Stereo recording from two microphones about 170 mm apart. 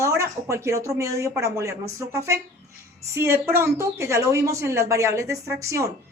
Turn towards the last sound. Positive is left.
turn(degrees=-20)  # may be behind; listen again after turning